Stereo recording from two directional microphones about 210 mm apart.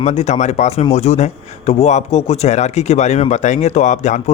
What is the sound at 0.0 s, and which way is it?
A man's voice, 30° left (ahead or behind).